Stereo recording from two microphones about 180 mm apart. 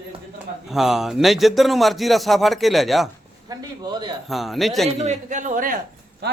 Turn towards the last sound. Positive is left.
turn(degrees=-65)  # may be behind; listen again after turning